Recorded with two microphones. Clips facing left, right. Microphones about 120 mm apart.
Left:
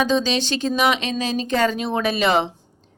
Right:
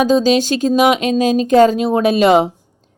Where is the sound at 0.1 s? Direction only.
40° right (ahead or behind).